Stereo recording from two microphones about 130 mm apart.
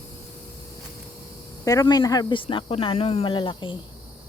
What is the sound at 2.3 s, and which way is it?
Speech, 40° left (ahead or behind).